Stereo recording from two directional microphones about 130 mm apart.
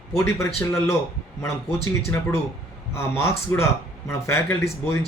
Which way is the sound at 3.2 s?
20° left (ahead or behind).